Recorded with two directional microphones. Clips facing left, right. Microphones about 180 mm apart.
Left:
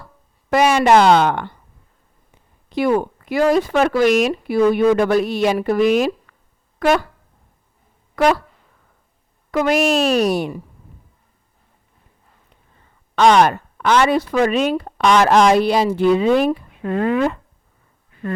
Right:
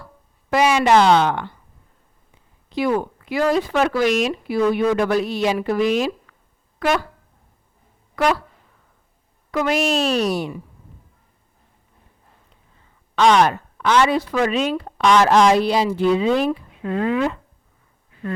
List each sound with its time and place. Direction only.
0.5 s a woman's voice: 50° left (ahead or behind)
2.6 s a woman's voice: 55° left (ahead or behind)
6.7 s speech: 45° left (ahead or behind)
8.1 s speech: 35° left (ahead or behind)
9.5 s speech: 45° left (ahead or behind)
13.1 s speech: 45° left (ahead or behind)